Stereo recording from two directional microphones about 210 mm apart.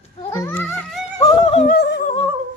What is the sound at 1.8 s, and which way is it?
Humming, 55° left (ahead or behind).